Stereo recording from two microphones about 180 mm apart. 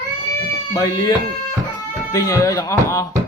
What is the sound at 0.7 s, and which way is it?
Speech, 20° left (ahead or behind).